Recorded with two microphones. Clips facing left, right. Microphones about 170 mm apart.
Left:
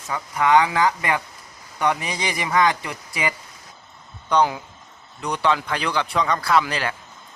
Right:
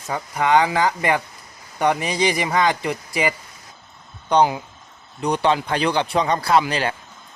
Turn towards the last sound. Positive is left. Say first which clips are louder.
# right 2 dB
turn(degrees=-25)  # may be behind; listen again after turning